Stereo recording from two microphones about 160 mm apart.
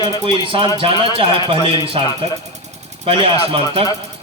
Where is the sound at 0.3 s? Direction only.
35° right (ahead or behind).